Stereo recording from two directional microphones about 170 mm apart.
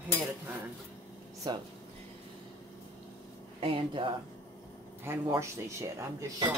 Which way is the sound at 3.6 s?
35° right (ahead or behind).